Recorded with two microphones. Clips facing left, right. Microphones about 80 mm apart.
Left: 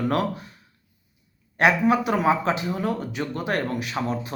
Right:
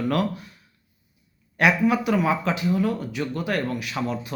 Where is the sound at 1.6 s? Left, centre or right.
Left.